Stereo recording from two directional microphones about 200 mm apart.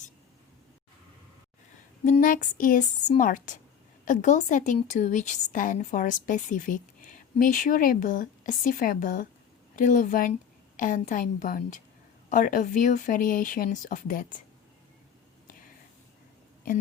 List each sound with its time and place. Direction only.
2.0 s a woman's voice: 40° left (ahead or behind)